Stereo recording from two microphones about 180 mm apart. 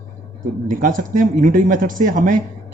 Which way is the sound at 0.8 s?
50° right (ahead or behind).